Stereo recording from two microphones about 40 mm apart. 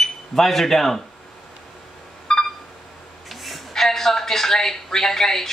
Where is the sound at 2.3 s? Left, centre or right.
Centre.